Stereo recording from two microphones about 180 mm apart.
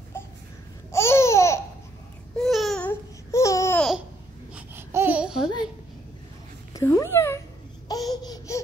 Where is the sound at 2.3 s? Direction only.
Centre (ahead or behind).